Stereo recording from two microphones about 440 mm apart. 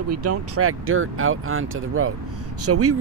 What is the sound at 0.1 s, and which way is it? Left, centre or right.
Speech, right.